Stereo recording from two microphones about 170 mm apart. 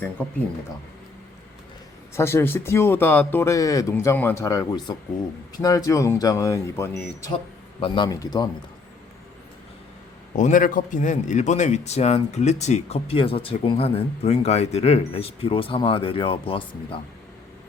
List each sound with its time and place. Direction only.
2.1 s speech: 15° left (ahead or behind)
7.3 s a man's voice: 30° left (ahead or behind)
10.3 s a man's voice: 50° left (ahead or behind); by 17.0 s 30° left (ahead or behind)